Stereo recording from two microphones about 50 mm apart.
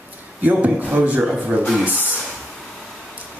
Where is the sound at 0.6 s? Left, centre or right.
Right.